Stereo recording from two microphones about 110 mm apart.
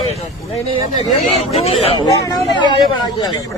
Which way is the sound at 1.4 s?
75° left (ahead or behind).